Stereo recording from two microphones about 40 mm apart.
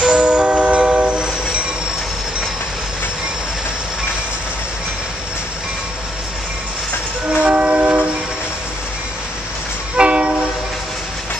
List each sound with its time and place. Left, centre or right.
0.0 s train: right
7.2 s train: right
9.9 s train: right